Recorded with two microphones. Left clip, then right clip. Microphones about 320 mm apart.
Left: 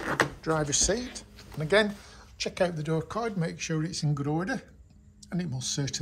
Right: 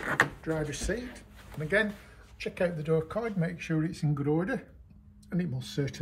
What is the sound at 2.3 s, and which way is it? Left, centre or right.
Speech, centre.